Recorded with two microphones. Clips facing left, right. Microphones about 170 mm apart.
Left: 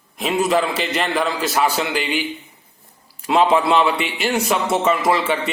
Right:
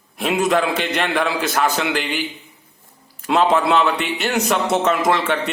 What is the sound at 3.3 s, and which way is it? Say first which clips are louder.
A man's voice: even; 5° left (ahead or behind).